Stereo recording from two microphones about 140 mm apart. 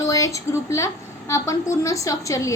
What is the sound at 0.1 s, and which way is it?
A woman's voice, 25° left (ahead or behind).